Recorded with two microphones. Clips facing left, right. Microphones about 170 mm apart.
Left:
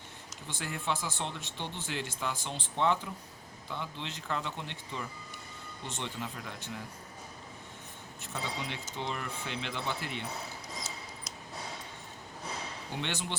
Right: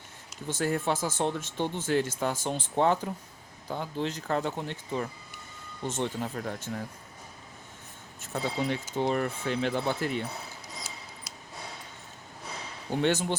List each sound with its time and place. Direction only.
0.4 s speech: 45° right (ahead or behind)
8.2 s speech: 45° right (ahead or behind)
13.0 s speech: 45° right (ahead or behind)